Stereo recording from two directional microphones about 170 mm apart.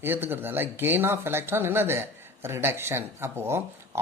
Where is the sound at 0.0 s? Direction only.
10° right (ahead or behind).